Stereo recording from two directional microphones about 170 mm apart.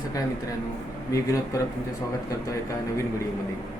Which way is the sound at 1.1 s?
20° left (ahead or behind).